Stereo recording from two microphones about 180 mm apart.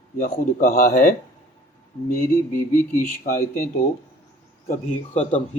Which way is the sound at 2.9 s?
45° left (ahead or behind).